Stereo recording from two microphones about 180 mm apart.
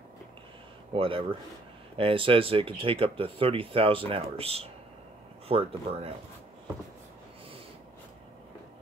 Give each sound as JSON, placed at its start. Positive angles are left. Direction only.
{"t": 0.9, "sound": "speech", "side_deg": -30}